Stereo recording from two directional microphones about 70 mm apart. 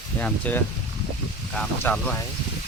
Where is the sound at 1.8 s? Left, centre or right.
Centre.